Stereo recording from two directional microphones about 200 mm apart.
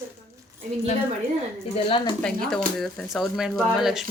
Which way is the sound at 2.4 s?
Centre (ahead or behind).